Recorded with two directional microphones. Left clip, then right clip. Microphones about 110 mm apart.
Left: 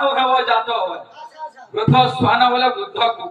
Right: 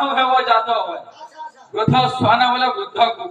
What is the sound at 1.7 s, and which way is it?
A man's voice, 40° right (ahead or behind).